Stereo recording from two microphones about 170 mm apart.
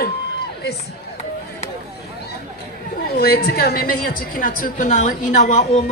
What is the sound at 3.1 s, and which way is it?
A woman's voice, 65° left (ahead or behind).